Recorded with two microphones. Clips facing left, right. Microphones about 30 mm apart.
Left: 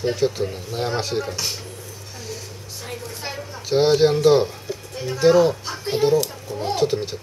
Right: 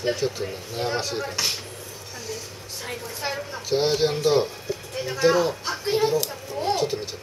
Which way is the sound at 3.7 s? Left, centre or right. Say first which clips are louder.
Left 6 dB; centre.